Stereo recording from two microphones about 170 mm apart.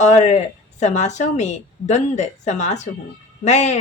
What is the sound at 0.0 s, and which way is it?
Speech, 45° left (ahead or behind).